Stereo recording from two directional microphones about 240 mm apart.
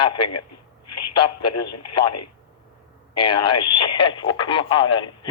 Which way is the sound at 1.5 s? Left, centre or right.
Left.